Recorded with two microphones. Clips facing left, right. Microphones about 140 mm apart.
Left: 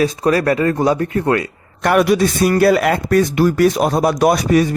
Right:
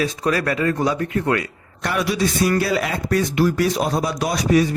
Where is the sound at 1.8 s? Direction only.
55° left (ahead or behind).